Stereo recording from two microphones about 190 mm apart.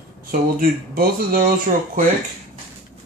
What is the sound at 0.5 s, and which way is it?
Speech, 50° right (ahead or behind).